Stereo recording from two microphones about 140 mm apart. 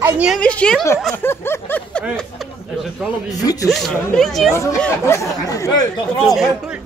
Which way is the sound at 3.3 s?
25° left (ahead or behind).